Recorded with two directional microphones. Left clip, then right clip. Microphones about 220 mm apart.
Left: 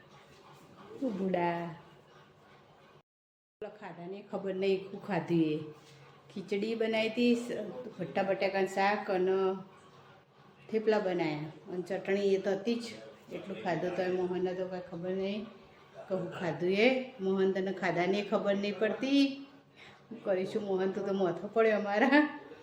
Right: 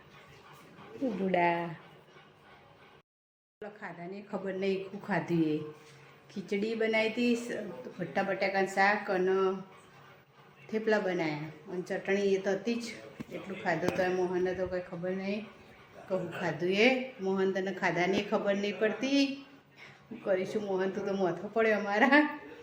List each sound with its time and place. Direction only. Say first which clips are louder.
1.3 s a man's voice: right 5 dB; 5° right (ahead or behind)
3.6 s a woman's voice: right 1 dB; centre (ahead or behind)
10.7 s a woman's voice: even; centre (ahead or behind)
14.3 s a man's voice: right 2 dB; 15° right (ahead or behind)
16.1 s a woman's voice: right 2 dB; centre (ahead or behind)